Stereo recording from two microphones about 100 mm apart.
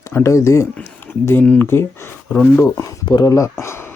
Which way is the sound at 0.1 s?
30° left (ahead or behind).